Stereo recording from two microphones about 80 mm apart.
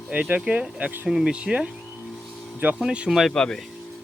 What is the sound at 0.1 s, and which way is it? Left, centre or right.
Speech, centre.